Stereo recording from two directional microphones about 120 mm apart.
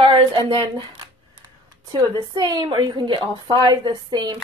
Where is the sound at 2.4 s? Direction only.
35° right (ahead or behind).